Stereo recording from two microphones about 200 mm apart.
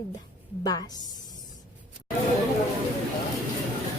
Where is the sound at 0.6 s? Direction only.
20° left (ahead or behind).